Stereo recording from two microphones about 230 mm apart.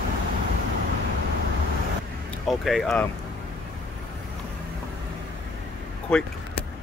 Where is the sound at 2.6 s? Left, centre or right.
Centre.